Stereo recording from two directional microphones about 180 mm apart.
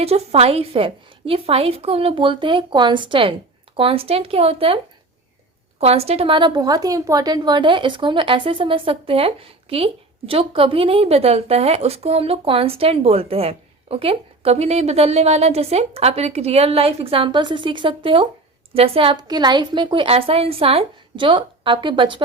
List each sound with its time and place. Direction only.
0.0 s a woman's voice: 35° right (ahead or behind)
5.8 s a woman's voice: 35° right (ahead or behind)